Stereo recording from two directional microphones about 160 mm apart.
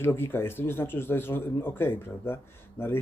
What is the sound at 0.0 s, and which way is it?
Speech, 15° left (ahead or behind).